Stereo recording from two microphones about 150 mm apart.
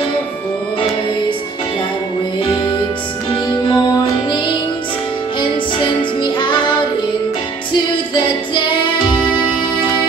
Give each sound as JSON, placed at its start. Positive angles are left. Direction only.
{"t": 3.3, "sound": "music", "side_deg": 30}
{"t": 5.4, "sound": "music", "side_deg": 30}